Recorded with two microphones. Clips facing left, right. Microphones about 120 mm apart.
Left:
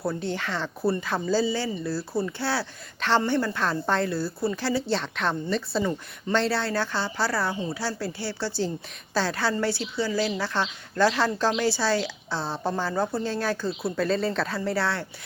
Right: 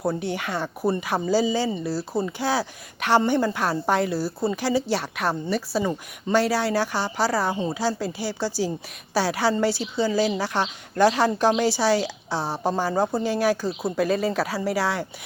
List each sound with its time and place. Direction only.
0.0 s speech: 20° right (ahead or behind)